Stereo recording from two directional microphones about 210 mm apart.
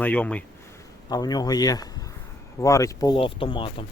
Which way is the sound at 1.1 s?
20° left (ahead or behind).